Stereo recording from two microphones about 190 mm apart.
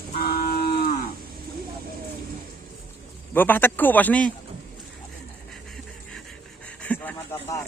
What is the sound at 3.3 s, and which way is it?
A man's voice, 10° left (ahead or behind).